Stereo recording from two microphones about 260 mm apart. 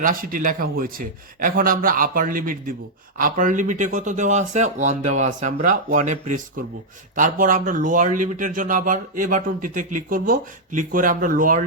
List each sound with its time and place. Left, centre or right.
0.0 s speech: right